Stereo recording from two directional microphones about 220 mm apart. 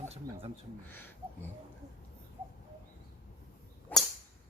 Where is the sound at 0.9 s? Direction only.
10° left (ahead or behind).